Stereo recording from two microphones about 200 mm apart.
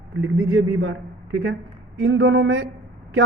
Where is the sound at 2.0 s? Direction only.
80° right.